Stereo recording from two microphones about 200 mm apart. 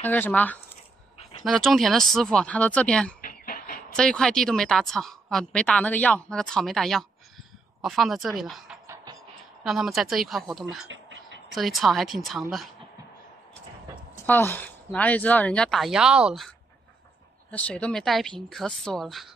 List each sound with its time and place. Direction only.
0.0 s a woman's voice: 10° left (ahead or behind)
3.2 s a sound: 45° left (ahead or behind)
3.9 s a woman's voice: 5° left (ahead or behind)
8.8 s music: 15° right (ahead or behind)
9.6 s a woman's voice: centre (ahead or behind)
10.9 s a sound: 65° right (ahead or behind)
11.5 s a woman's voice: centre (ahead or behind)
14.2 s a woman's voice: 10° left (ahead or behind)
17.5 s a woman's voice: 5° left (ahead or behind)